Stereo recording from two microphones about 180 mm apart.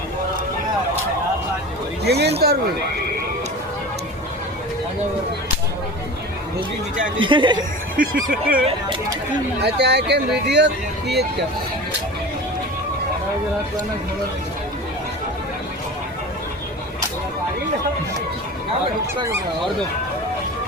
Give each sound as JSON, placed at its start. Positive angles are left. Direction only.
{"t": 2.0, "sound": "speech", "side_deg": -65}
{"t": 7.2, "sound": "speech", "side_deg": -25}
{"t": 7.9, "sound": "speech", "side_deg": -55}
{"t": 9.6, "sound": "speech", "side_deg": -70}